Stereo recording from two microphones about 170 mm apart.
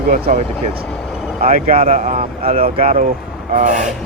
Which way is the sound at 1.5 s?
55° right (ahead or behind).